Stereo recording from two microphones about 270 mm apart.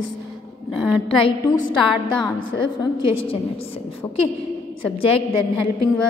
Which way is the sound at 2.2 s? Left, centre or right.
Centre.